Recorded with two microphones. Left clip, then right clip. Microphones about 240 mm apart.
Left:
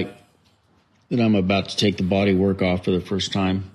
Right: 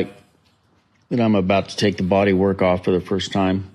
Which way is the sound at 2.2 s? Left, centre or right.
Centre.